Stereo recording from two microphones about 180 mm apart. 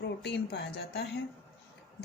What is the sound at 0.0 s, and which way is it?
A woman's voice, 70° left (ahead or behind).